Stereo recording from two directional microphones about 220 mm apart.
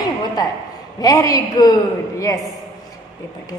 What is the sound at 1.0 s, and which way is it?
A woman's voice, 15° left (ahead or behind).